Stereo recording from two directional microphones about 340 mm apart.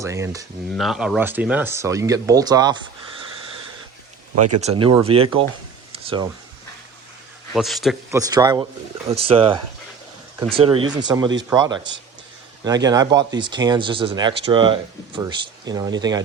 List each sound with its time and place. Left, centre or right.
0.0 s speech: centre
4.8 s speech: centre
5.9 s a sound: centre
7.5 s speech: centre